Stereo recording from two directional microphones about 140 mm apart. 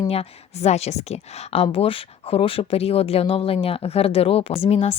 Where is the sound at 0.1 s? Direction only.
50° left (ahead or behind).